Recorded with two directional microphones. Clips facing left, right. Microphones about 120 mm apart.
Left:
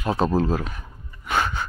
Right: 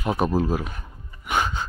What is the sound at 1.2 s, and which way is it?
Gasp, 15° right (ahead or behind).